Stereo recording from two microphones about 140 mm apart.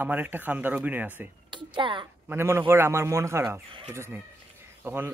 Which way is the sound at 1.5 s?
35° right (ahead or behind).